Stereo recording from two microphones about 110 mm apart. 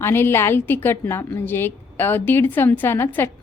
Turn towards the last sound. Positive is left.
turn(degrees=20)  # may be behind; listen again after turning